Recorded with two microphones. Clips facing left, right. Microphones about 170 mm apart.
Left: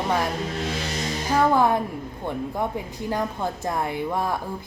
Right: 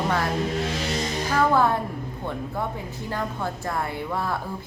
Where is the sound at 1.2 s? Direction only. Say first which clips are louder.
Left 2 dB; 15° left (ahead or behind).